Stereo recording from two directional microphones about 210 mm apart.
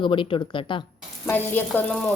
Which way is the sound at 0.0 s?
25° left (ahead or behind).